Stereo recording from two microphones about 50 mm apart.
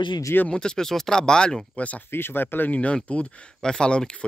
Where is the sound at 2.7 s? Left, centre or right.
Left.